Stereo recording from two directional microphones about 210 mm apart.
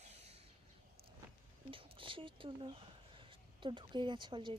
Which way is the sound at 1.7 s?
25° right (ahead or behind).